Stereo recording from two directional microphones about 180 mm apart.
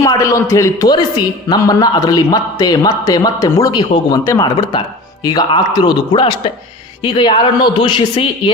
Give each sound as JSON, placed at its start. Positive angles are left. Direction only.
{"t": 0.0, "sound": "a man's voice", "side_deg": 20}